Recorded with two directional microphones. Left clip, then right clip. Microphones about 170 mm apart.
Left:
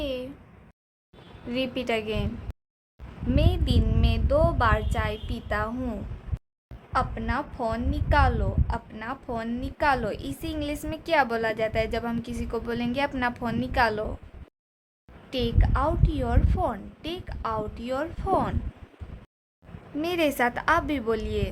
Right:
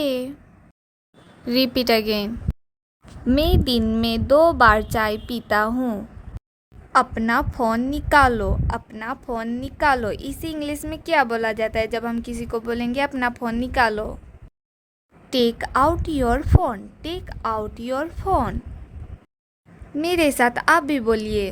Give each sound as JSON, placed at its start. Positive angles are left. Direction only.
{"t": 0.0, "sound": "a sound", "side_deg": -50}
{"t": 1.5, "sound": "a woman's voice", "side_deg": -40}
{"t": 3.2, "sound": "a woman's voice", "side_deg": -50}
{"t": 15.3, "sound": "a woman's voice", "side_deg": -45}
{"t": 20.0, "sound": "a woman's voice", "side_deg": -30}